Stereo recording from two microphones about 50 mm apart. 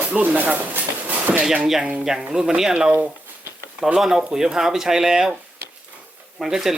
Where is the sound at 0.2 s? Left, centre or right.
Right.